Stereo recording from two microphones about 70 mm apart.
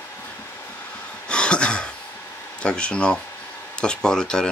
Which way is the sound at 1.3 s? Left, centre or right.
Centre.